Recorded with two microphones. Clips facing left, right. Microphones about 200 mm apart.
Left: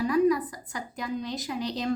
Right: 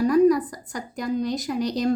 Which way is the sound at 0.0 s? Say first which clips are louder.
Right 5 dB; 45° right (ahead or behind).